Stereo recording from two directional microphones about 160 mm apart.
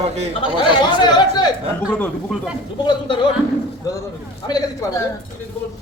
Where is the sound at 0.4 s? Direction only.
30° left (ahead or behind).